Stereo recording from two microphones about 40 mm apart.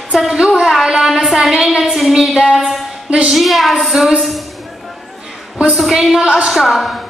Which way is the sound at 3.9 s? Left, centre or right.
Centre.